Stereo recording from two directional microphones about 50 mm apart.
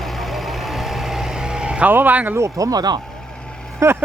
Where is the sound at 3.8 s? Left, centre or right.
Right.